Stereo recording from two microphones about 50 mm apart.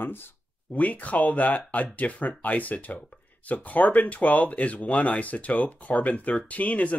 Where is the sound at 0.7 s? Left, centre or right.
Left.